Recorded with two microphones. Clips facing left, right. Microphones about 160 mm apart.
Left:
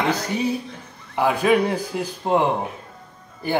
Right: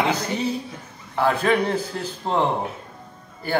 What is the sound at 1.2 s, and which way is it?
A man's voice, 10° left (ahead or behind).